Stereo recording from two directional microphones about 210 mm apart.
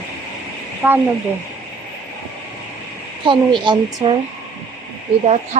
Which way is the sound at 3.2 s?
20° right (ahead or behind).